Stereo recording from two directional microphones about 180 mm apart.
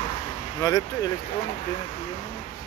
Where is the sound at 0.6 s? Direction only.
20° left (ahead or behind).